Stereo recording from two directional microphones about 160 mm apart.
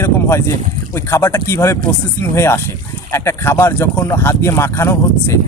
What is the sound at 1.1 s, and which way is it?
Speech, 15° left (ahead or behind).